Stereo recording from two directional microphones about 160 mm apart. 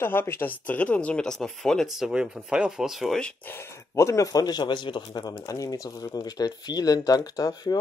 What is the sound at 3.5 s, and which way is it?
Speech, 15° left (ahead or behind).